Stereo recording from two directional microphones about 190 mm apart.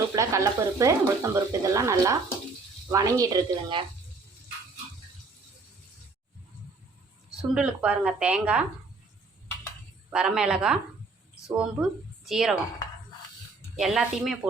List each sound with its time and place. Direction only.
0.2 s speech: 15° right (ahead or behind)
7.5 s speech: 5° right (ahead or behind)
10.1 s a woman's voice: 5° right (ahead or behind)
13.7 s speech: centre (ahead or behind)